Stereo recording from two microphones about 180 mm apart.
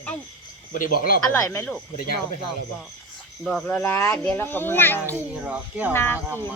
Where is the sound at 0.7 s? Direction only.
50° left (ahead or behind).